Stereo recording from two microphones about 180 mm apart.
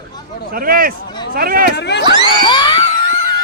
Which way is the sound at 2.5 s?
25° left (ahead or behind).